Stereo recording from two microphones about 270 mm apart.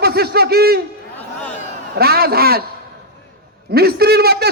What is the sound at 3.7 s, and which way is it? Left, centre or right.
Speech, right.